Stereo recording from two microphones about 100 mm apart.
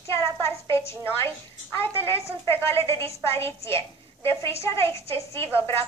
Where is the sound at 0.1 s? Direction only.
25° left (ahead or behind).